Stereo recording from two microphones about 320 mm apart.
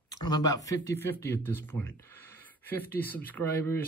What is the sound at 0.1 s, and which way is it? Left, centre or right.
Speech, centre.